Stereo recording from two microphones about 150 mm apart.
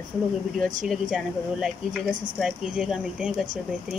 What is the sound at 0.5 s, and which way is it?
Speech, 60° right (ahead or behind).